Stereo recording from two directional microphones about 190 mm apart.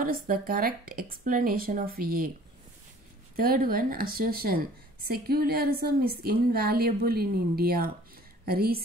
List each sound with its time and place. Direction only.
0.0 s speech: 50° right (ahead or behind)
3.3 s speech: 50° right (ahead or behind)